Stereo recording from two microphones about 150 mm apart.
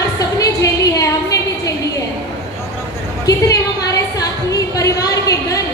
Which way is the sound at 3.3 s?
25° left (ahead or behind).